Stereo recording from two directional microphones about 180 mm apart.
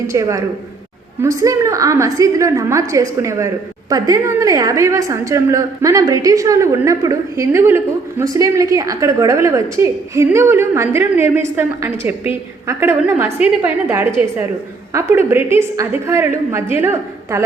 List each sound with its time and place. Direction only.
0.1 s a woman's voice: 15° right (ahead or behind)